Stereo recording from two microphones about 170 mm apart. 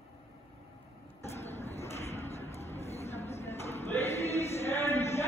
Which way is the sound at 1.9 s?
40° left (ahead or behind).